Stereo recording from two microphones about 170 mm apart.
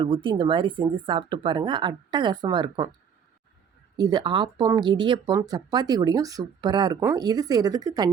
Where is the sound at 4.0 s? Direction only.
25° right (ahead or behind).